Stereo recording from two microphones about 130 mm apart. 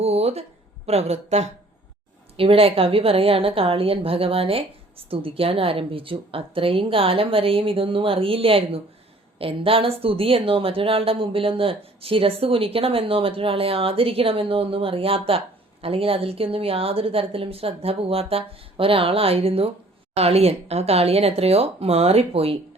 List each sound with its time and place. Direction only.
0.0 s a woman's voice: 50° right (ahead or behind)
2.3 s a woman's voice: 45° right (ahead or behind)